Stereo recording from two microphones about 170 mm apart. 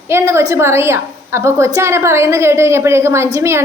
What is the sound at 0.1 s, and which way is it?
A woman's voice, 15° right (ahead or behind).